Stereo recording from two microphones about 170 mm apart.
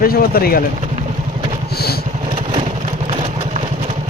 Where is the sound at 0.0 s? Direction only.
60° left (ahead or behind).